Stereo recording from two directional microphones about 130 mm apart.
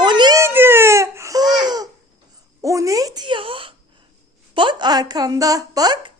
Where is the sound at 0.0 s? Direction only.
35° right (ahead or behind).